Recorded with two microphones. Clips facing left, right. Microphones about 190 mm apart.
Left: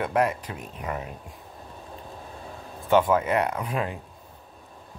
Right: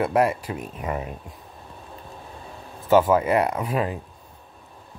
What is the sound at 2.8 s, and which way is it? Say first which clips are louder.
Speech: right 3 dB; 5° right (ahead or behind).